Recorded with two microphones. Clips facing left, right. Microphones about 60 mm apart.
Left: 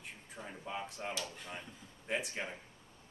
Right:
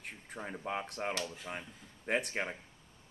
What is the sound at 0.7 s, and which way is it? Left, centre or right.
Speech, right.